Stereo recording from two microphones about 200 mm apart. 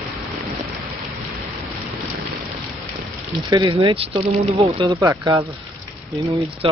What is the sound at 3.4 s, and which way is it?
Speech, 25° right (ahead or behind).